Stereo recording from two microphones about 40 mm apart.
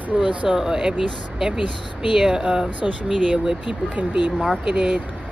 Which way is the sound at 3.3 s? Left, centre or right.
Right.